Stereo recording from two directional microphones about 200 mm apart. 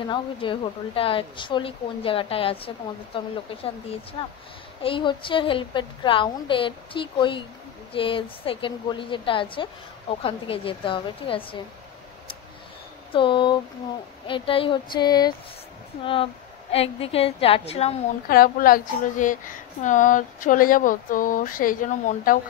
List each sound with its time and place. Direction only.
0.1 s speech: 25° left (ahead or behind)
13.1 s speech: 25° left (ahead or behind)
18.3 s speech: 45° left (ahead or behind)